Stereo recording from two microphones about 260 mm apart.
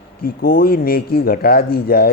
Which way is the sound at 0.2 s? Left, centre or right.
Left.